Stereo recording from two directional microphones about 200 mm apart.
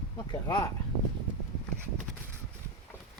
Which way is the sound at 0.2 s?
20° left (ahead or behind).